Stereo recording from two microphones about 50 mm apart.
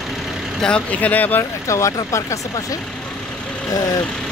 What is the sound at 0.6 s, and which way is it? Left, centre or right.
Speech, left.